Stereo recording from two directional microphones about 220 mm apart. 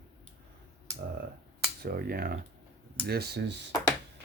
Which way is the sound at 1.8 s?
40° right (ahead or behind).